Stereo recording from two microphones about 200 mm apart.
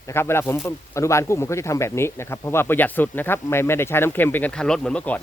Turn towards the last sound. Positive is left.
turn(degrees=5)  # may be behind; listen again after turning